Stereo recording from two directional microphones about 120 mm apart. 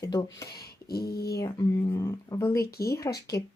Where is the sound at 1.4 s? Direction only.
30° left (ahead or behind).